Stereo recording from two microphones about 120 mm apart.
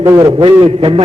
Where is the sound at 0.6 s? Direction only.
50° right (ahead or behind).